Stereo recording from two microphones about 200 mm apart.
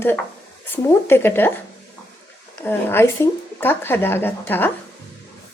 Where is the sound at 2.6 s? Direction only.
10° left (ahead or behind).